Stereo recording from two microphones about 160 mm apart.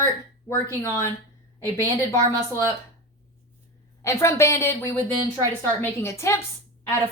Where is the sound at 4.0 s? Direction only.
15° left (ahead or behind).